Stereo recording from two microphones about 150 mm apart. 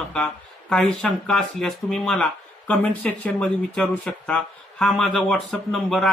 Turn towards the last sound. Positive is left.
turn(degrees=5)  # may be behind; listen again after turning